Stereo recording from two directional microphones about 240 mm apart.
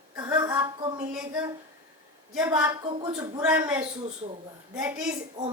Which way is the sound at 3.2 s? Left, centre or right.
Centre.